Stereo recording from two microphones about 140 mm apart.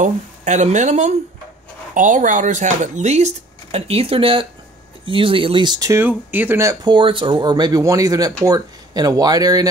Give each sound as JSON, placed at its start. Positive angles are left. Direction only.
{"t": 0.0, "sound": "speech", "side_deg": -60}